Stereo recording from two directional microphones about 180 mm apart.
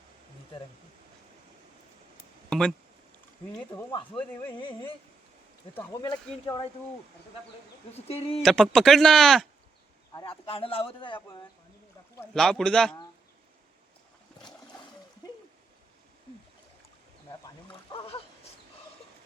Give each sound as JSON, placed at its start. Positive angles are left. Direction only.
{"t": 2.5, "sound": "a sound", "side_deg": 5}
{"t": 4.2, "sound": "speech", "side_deg": 10}
{"t": 4.6, "sound": "speech", "side_deg": 25}
{"t": 5.7, "sound": "speech", "side_deg": 15}
{"t": 8.0, "sound": "a man's voice", "side_deg": 35}
{"t": 8.4, "sound": "speech", "side_deg": 0}
{"t": 10.2, "sound": "a man's voice", "side_deg": 30}
{"t": 12.3, "sound": "speech", "side_deg": 0}
{"t": 17.9, "sound": "dog", "side_deg": 30}